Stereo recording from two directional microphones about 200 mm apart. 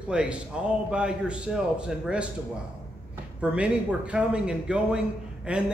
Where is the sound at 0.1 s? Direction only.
5° right (ahead or behind).